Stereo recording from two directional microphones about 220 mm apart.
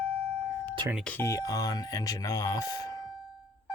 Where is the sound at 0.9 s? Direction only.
5° left (ahead or behind).